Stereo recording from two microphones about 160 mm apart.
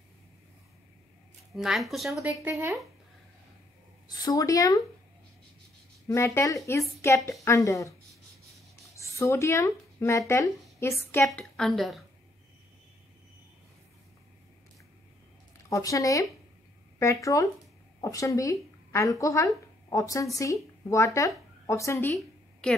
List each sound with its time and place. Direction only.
1.5 s a woman's voice: centre (ahead or behind)
2.2 s speech: 15° right (ahead or behind)
4.2 s a woman's voice: 20° left (ahead or behind)
6.0 s a woman's voice: 20° left (ahead or behind)
8.9 s speech: 20° left (ahead or behind)
11.2 s a woman's voice: 5° left (ahead or behind)
15.7 s a woman's voice: 20° left (ahead or behind)